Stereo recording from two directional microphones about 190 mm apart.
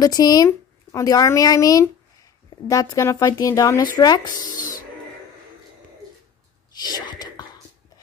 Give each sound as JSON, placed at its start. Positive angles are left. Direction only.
{"t": 0.0, "sound": "speech", "side_deg": 20}
{"t": 6.7, "sound": "whispering", "side_deg": 20}